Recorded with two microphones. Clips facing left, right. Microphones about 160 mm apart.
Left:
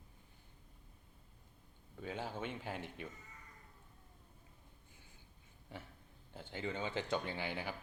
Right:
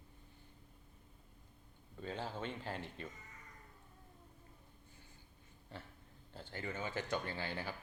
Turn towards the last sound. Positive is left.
turn(degrees=15)  # may be behind; listen again after turning